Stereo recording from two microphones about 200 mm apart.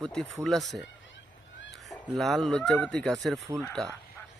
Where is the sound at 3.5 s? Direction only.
15° right (ahead or behind).